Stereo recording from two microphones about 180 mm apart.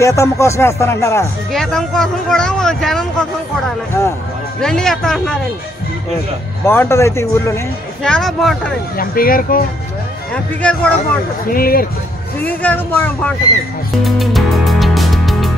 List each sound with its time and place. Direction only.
0.0 s speech: 15° left (ahead or behind)
1.5 s speech: centre (ahead or behind)
4.6 s speech: 5° left (ahead or behind)
6.6 s speech: 15° left (ahead or behind)
8.0 s speech: 5° left (ahead or behind)
8.9 s speech: 55° left (ahead or behind)
10.3 s speech: 5° left (ahead or behind)
11.4 s speech: 55° left (ahead or behind)
12.4 s speech: 10° left (ahead or behind)
14.0 s music: centre (ahead or behind)